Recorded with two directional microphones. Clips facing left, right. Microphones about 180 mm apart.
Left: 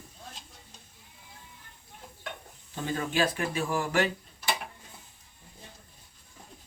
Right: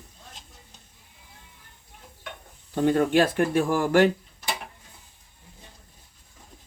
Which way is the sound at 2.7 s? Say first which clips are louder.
Right 10 dB; 60° right (ahead or behind).